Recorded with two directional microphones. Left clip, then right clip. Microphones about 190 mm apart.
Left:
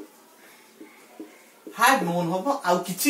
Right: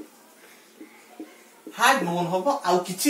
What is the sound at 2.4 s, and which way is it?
Speech, 15° left (ahead or behind).